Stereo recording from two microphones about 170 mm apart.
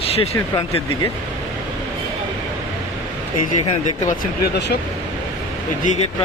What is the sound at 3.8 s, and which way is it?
Speech, 45° left (ahead or behind).